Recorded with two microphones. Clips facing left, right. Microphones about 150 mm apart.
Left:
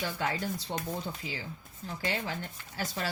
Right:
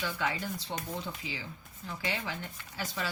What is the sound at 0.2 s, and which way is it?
Speech, 45° left (ahead or behind).